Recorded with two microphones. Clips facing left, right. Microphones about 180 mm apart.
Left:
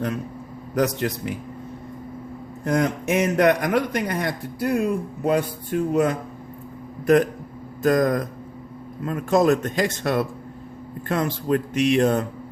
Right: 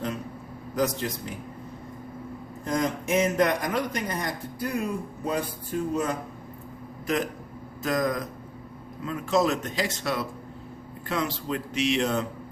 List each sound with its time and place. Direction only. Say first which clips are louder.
0.8 s a man's voice: left 5 dB; 65° left (ahead or behind)
2.6 s a man's voice: left 5 dB; 60° left (ahead or behind)
7.8 s a man's voice: left 7 dB; 50° left (ahead or behind)